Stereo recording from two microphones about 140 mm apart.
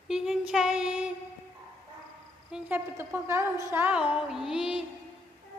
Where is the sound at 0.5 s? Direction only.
5° right (ahead or behind).